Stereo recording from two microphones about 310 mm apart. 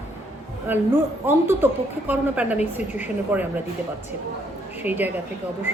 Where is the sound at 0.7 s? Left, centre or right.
Centre.